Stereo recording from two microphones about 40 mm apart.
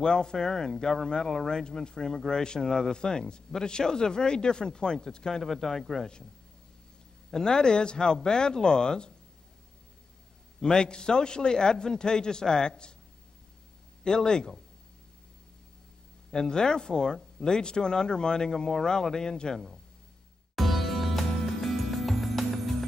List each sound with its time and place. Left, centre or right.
0.0 s speech: centre
7.2 s a man's voice: centre
10.6 s a man's voice: centre
14.0 s speech: centre
16.3 s speech: centre
20.5 s music: centre